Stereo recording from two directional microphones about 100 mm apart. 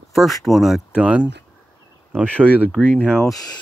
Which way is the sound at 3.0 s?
15° left (ahead or behind).